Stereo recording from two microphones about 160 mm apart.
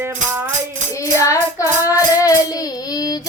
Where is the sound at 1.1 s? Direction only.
20° left (ahead or behind).